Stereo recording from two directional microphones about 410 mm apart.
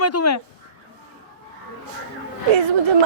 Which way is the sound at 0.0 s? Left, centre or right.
Left.